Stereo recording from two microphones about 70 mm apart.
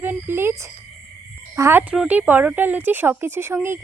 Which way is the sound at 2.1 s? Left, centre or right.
Right.